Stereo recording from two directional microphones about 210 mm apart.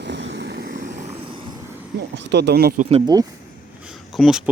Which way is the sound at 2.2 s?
55° right (ahead or behind).